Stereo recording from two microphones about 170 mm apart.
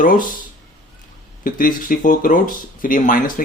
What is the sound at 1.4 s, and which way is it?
Speech, 55° left (ahead or behind).